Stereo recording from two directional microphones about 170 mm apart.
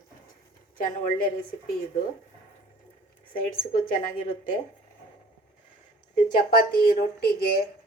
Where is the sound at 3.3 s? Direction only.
55° left (ahead or behind).